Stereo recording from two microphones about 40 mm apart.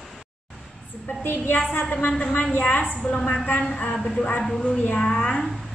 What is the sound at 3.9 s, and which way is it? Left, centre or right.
Speech, centre.